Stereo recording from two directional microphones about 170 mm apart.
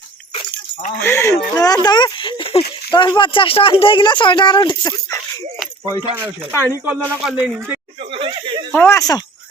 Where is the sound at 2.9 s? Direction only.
25° left (ahead or behind).